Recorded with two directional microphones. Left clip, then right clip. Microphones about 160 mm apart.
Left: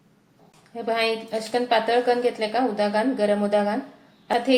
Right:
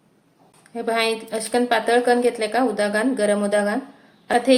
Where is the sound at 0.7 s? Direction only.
45° right (ahead or behind).